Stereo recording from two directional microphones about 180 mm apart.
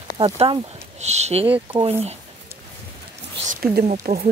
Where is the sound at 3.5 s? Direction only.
60° right (ahead or behind).